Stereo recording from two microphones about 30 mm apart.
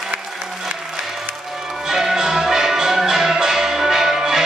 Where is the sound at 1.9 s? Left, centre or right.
Centre.